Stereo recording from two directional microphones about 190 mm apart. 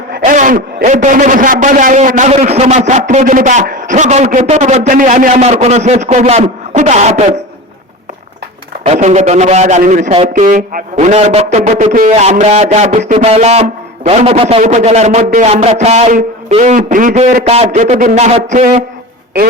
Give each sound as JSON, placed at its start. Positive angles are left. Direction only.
{"t": 0.2, "sound": "a man's voice", "side_deg": -40}
{"t": 8.9, "sound": "a man's voice", "side_deg": -40}
{"t": 10.9, "sound": "a man's voice", "side_deg": -35}